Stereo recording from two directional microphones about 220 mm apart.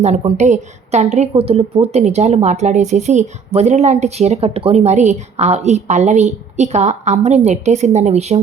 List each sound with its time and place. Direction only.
0.0 s speech: 30° right (ahead or behind)